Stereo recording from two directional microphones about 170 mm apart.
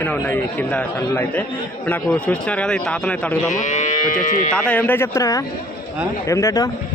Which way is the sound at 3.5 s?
45° left (ahead or behind).